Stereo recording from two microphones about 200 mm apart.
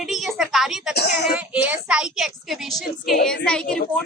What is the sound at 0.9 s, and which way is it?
Speech, 55° left (ahead or behind).